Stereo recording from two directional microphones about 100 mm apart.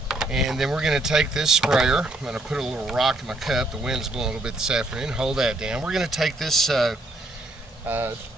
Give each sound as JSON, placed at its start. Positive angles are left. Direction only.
{"t": 0.1, "sound": "speech", "side_deg": -5}
{"t": 7.8, "sound": "speech", "side_deg": -20}